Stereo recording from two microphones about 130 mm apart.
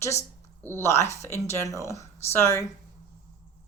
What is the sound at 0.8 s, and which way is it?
A woman's voice, 20° left (ahead or behind).